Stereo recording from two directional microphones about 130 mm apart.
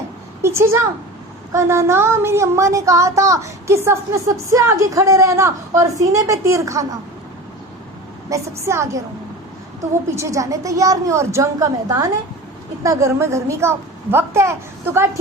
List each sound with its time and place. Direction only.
0.4 s a woman's voice: 20° right (ahead or behind)
8.3 s speech: 20° right (ahead or behind)
10.2 s speech: 25° right (ahead or behind)